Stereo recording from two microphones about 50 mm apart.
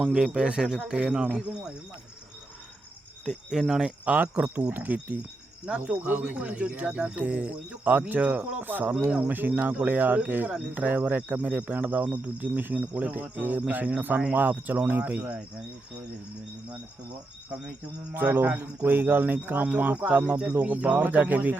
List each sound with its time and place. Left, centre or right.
0.0 s speech: centre
3.6 s speech: centre
4.2 s speech: right
5.6 s speech: right
8.9 s speech: right
9.8 s speech: right
18.1 s speech: right
18.4 s speech: right
18.9 s speech: right